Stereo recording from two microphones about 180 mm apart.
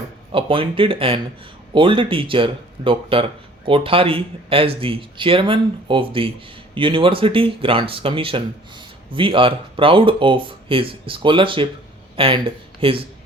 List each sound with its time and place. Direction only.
0.3 s speech: 30° right (ahead or behind)